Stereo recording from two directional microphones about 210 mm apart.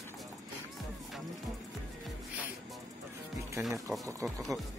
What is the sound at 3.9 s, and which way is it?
Speech, 15° right (ahead or behind).